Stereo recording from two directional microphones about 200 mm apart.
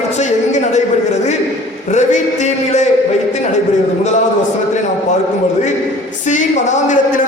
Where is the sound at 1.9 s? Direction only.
35° left (ahead or behind).